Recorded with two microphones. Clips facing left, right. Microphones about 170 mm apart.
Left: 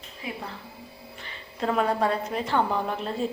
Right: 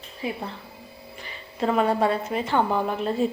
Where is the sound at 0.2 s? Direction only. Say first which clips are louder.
Right 6 dB; 25° right (ahead or behind).